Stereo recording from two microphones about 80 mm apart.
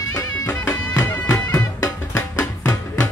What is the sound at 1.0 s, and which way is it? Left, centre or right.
Music, left.